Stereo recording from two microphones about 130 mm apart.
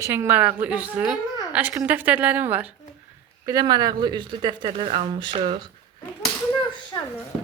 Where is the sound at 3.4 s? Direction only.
30° right (ahead or behind).